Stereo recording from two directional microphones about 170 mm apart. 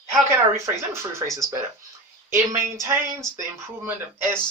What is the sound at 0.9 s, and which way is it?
Speech, 15° right (ahead or behind).